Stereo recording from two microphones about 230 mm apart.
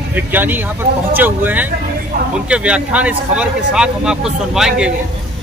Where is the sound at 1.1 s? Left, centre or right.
Centre.